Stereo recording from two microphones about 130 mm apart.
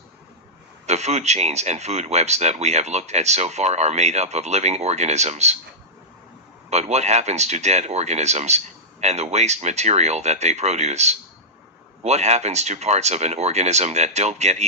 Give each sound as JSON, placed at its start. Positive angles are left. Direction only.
{"t": 0.9, "sound": "speech", "side_deg": -60}
{"t": 6.7, "sound": "speech", "side_deg": -60}